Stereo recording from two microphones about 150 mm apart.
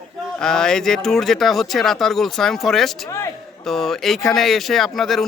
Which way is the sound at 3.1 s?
20° left (ahead or behind).